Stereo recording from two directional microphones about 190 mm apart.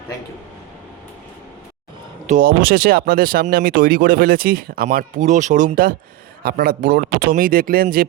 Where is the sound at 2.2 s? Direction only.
45° right (ahead or behind).